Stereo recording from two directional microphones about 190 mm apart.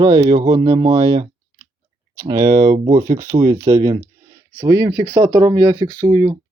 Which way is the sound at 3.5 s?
15° right (ahead or behind).